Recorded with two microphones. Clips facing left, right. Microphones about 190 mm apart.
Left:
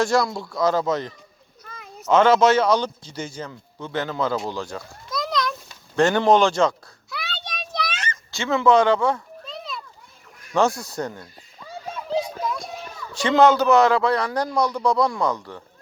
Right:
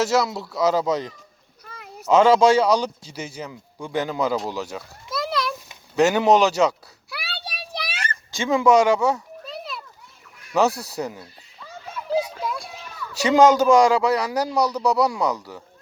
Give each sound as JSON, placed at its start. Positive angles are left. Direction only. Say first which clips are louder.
{"t": 0.0, "sound": "a man's voice", "louder": "even", "side_deg": -5}
{"t": 4.4, "sound": "a sound", "louder": "even", "side_deg": -5}
{"t": 10.5, "sound": "a man's voice", "louder": "even", "side_deg": -5}
{"t": 11.6, "sound": "children playing", "louder": "left 3 dB", "side_deg": 20}
{"t": 12.6, "sound": "a sound", "louder": "left 5 dB", "side_deg": 40}
{"t": 13.1, "sound": "a man's voice", "louder": "right 1 dB", "side_deg": -10}